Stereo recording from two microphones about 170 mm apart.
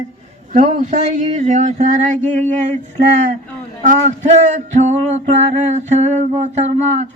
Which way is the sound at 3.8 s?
45° right (ahead or behind).